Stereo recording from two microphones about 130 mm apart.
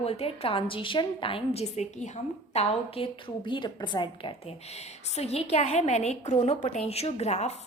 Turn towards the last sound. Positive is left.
turn(degrees=60)  # may be behind; listen again after turning